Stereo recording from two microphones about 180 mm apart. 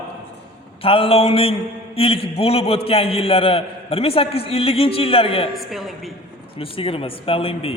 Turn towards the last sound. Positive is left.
turn(degrees=30)  # may be behind; listen again after turning